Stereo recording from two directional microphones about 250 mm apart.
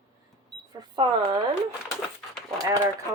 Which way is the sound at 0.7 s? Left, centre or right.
Centre.